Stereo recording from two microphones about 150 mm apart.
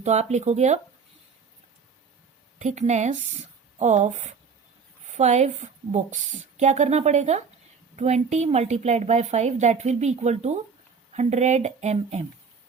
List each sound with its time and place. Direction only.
0.0 s a woman's voice: 50° right (ahead or behind)
2.6 s a woman's voice: 50° right (ahead or behind)